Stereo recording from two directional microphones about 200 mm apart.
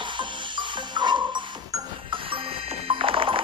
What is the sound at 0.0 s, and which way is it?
Music, 25° right (ahead or behind).